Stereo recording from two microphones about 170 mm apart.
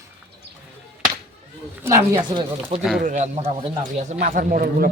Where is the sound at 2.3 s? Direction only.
30° right (ahead or behind).